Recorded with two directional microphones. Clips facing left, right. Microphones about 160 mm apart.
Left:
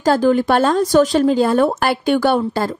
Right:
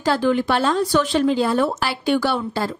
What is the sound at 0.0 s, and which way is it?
Speech, 40° left (ahead or behind).